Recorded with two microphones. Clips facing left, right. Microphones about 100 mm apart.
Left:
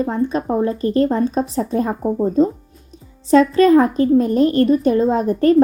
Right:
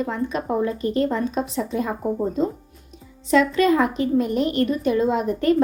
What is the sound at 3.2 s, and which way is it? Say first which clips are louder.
A woman's voice: left 6 dB; 40° left (ahead or behind).